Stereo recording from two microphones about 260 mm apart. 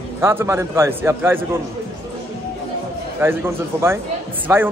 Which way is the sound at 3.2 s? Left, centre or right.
Centre.